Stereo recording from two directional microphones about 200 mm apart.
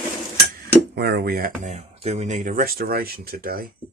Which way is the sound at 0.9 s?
55° right (ahead or behind).